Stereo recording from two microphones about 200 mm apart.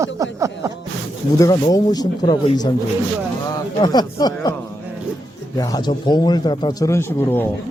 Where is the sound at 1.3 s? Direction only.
15° left (ahead or behind).